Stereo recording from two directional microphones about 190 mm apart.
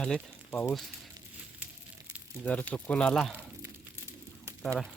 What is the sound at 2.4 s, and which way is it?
Speech, 5° left (ahead or behind).